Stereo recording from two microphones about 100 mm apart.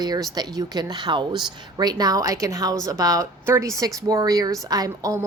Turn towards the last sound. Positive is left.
turn(degrees=-35)  # may be behind; listen again after turning